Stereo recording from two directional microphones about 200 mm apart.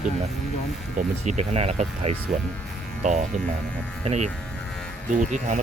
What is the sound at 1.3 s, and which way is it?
Speech, 30° right (ahead or behind).